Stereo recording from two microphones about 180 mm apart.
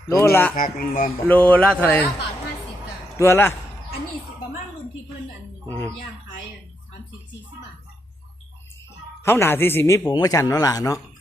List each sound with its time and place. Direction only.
0.1 s a man's voice: 15° left (ahead or behind)
0.5 s speech: 50° left (ahead or behind)
1.3 s a man's voice: 10° left (ahead or behind)
3.2 s a man's voice: 10° left (ahead or behind)
5.6 s a man's voice: 10° left (ahead or behind)
9.2 s a man's voice: 15° left (ahead or behind)